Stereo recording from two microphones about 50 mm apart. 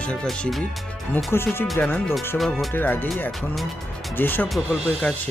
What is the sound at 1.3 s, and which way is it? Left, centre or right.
Speech, left.